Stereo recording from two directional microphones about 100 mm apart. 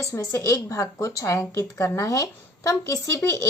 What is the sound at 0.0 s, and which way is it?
A woman's voice, 30° left (ahead or behind).